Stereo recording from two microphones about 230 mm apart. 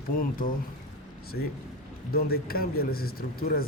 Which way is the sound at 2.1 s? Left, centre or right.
Left.